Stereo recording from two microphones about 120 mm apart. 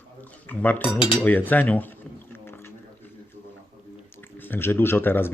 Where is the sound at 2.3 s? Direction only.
20° left (ahead or behind).